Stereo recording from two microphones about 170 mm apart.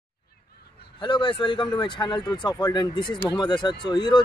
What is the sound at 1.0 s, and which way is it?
Speech, 30° left (ahead or behind).